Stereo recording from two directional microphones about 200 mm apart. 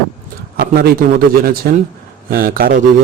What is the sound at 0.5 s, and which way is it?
Speech, 55° right (ahead or behind).